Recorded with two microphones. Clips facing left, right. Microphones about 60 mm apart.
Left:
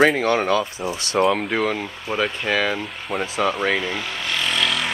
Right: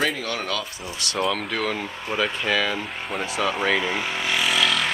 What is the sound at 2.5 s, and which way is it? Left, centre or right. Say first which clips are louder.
Speech: left 2 dB; centre.